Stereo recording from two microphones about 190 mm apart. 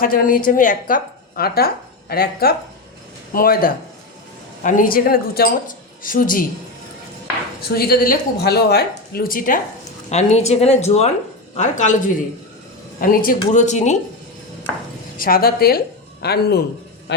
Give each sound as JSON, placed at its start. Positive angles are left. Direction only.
{"t": 0.0, "sound": "a woman's voice", "side_deg": 45}
{"t": 7.6, "sound": "a woman's voice", "side_deg": 55}
{"t": 10.1, "sound": "a woman's voice", "side_deg": 35}
{"t": 15.2, "sound": "a woman's voice", "side_deg": 50}